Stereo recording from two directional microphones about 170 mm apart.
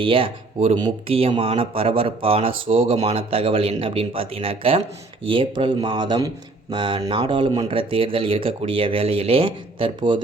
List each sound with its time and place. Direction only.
0.0 s speech: 30° right (ahead or behind)